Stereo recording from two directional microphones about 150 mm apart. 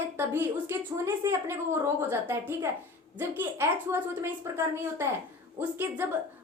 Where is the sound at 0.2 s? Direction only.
15° right (ahead or behind).